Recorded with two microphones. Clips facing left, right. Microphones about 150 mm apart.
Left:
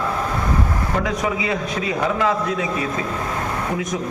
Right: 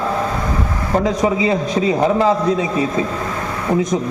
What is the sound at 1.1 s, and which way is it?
A man's voice, 25° right (ahead or behind).